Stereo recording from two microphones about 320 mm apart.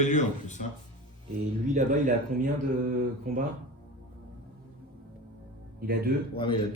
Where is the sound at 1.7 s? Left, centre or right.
Right.